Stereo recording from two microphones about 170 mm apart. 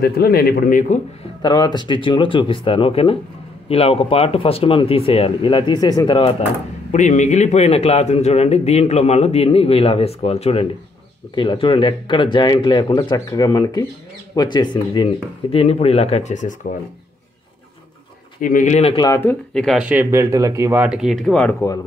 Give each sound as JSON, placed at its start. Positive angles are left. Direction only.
{"t": 0.0, "sound": "speech", "side_deg": 65}
{"t": 1.4, "sound": "a man's voice", "side_deg": 25}
{"t": 6.9, "sound": "a man's voice", "side_deg": 45}
{"t": 18.4, "sound": "speech", "side_deg": 50}
{"t": 18.9, "sound": "speech", "side_deg": 20}
{"t": 19.2, "sound": "speech", "side_deg": 5}
{"t": 20.8, "sound": "speech", "side_deg": -5}